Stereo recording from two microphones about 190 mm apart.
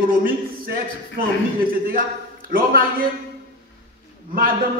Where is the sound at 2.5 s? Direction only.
50° right (ahead or behind).